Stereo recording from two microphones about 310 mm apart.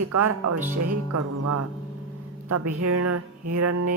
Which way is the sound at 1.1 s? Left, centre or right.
Right.